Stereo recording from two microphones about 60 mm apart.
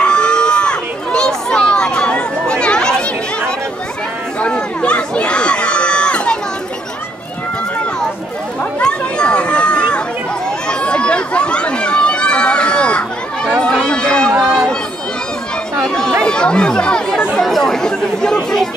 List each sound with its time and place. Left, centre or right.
0.0 s a sound: centre
4.4 s chatter: centre
8.7 s children playing: centre
10.7 s a sound: centre
13.8 s run: centre
15.8 s chatter: centre
17.4 s chatter: centre